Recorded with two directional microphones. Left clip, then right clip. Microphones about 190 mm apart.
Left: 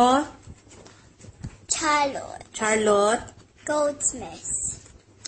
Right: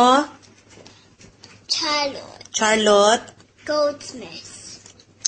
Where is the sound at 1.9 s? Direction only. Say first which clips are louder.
Even; 10° left (ahead or behind).